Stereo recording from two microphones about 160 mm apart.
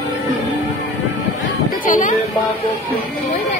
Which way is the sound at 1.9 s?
55° left (ahead or behind).